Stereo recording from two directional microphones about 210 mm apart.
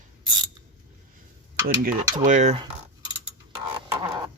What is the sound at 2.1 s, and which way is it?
Speech, 35° right (ahead or behind).